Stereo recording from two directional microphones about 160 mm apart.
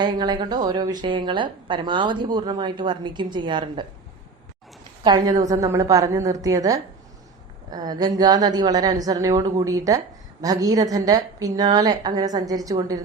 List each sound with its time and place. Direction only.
0.0 s a woman's voice: 25° right (ahead or behind)
5.0 s a woman's voice: 25° right (ahead or behind)